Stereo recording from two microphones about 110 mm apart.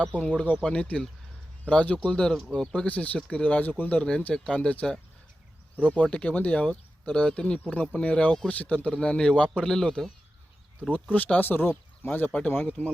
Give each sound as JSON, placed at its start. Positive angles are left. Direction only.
{"t": 0.2, "sound": "speech", "side_deg": 10}
{"t": 11.1, "sound": "speech", "side_deg": 15}